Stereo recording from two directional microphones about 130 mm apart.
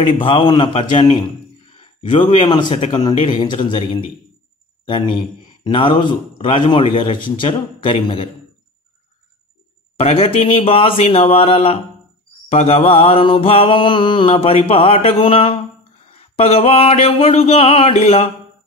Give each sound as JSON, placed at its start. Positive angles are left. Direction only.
{"t": 0.2, "sound": "a man's voice", "side_deg": 40}
{"t": 1.7, "sound": "a sound", "side_deg": 40}
{"t": 2.9, "sound": "a man's voice", "side_deg": 35}
{"t": 3.2, "sound": "mantra", "side_deg": 50}
{"t": 3.4, "sound": "a man's voice", "side_deg": 40}
{"t": 9.9, "sound": "mantra", "side_deg": 50}